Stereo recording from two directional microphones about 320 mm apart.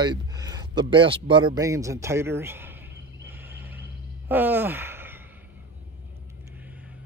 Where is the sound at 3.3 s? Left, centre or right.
Centre.